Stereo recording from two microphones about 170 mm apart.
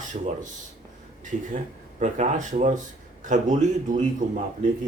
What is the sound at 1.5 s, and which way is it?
Speech, 45° right (ahead or behind).